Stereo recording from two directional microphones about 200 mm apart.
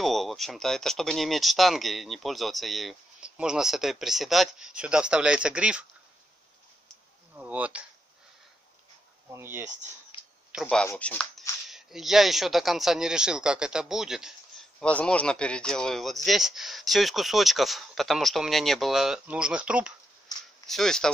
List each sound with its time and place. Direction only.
0.0 s speech: centre (ahead or behind)
7.3 s speech: 5° right (ahead or behind)
9.3 s speech: 10° right (ahead or behind)
10.5 s speech: centre (ahead or behind)
20.3 s a sound: 20° left (ahead or behind)
20.6 s speech: centre (ahead or behind)